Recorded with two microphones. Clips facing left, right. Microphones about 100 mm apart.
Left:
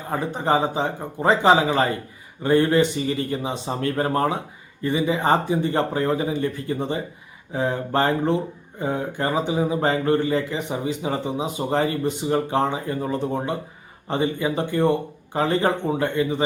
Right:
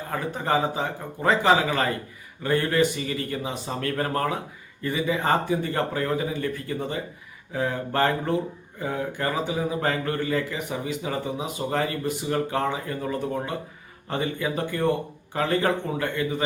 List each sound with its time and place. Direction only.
0.1 s speech: 25° left (ahead or behind)